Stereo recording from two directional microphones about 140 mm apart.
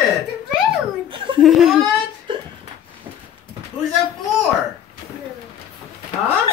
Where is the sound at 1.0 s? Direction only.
35° right (ahead or behind).